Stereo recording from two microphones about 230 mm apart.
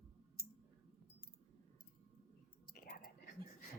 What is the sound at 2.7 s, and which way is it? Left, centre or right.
Whispering, left.